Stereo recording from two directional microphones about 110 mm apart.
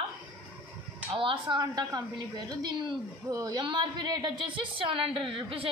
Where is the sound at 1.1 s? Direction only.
50° right (ahead or behind).